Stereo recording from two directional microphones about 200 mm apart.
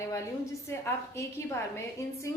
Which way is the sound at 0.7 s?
15° left (ahead or behind).